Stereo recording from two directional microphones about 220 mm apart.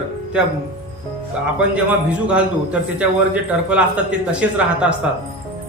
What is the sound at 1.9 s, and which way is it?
A man's voice, 5° right (ahead or behind).